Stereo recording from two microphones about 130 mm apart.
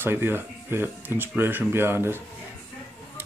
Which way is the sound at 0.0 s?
15° right (ahead or behind).